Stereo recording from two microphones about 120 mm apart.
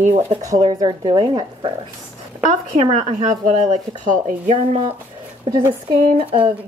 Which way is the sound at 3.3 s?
90° right.